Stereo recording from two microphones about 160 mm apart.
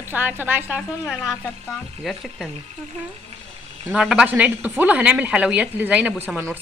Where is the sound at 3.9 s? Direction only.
5° right (ahead or behind).